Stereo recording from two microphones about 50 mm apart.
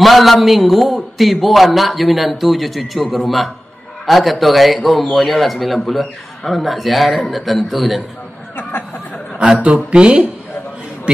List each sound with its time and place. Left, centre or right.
0.0 s a man's voice: centre
8.5 s a sound: left
9.4 s a man's voice: right